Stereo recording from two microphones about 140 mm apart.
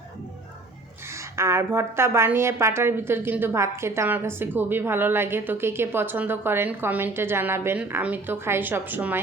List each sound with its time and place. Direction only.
1.0 s a woman's voice: 20° right (ahead or behind)